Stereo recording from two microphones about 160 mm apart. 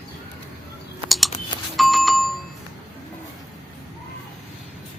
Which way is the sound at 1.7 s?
Centre (ahead or behind).